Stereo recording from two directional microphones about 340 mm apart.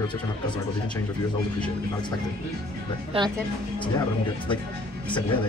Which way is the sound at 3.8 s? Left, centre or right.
Centre.